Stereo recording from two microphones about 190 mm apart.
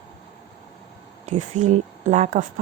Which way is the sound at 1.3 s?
40° right (ahead or behind).